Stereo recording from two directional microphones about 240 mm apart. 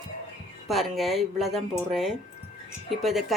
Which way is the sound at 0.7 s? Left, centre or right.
Centre.